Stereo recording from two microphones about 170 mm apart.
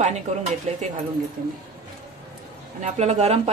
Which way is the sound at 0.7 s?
40° right (ahead or behind).